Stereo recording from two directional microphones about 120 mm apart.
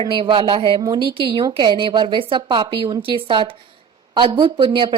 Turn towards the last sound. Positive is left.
turn(degrees=-40)  # may be behind; listen again after turning